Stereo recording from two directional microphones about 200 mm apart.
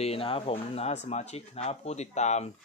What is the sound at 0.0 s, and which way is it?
Speech, 30° left (ahead or behind).